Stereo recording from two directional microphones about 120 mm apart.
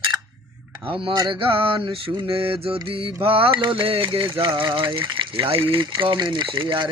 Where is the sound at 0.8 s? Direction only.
45° right (ahead or behind).